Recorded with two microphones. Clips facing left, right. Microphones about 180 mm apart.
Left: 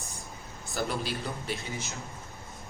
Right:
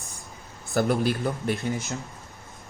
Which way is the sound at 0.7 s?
55° right (ahead or behind).